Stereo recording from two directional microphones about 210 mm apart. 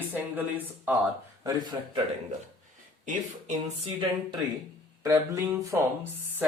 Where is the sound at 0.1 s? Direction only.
10° right (ahead or behind).